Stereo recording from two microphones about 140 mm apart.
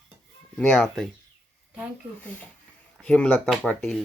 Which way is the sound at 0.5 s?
5° left (ahead or behind).